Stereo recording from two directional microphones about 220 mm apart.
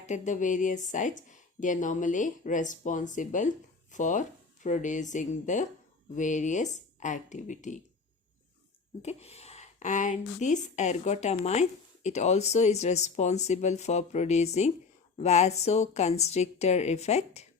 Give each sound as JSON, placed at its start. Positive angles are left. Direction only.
{"t": 0.0, "sound": "speech", "side_deg": 35}
{"t": 9.0, "sound": "a woman's voice", "side_deg": 30}